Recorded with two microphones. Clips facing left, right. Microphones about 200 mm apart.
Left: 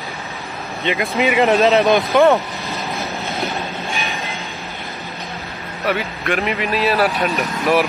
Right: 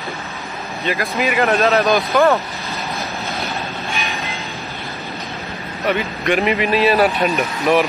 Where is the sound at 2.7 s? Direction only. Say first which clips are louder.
Left 1 dB; centre (ahead or behind).